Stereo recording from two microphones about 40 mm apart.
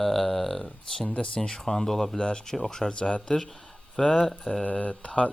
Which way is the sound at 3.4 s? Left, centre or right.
Centre.